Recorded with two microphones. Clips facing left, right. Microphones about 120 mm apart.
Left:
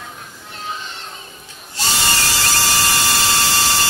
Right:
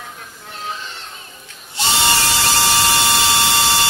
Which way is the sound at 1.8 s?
25° right (ahead or behind).